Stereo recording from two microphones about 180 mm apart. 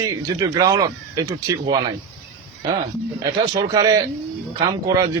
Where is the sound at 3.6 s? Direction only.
20° right (ahead or behind).